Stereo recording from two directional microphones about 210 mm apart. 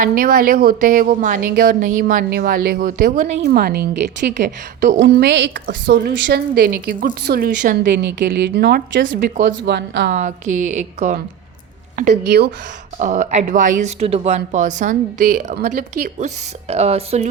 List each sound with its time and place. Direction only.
0.0 s a woman's voice: 45° right (ahead or behind)
4.9 s a woman's voice: 55° right (ahead or behind)
7.9 s a woman's voice: 55° right (ahead or behind)
9.2 s speech: 40° right (ahead or behind)
9.6 s a woman's voice: 55° right (ahead or behind)
10.1 s a woman's voice: 35° right (ahead or behind)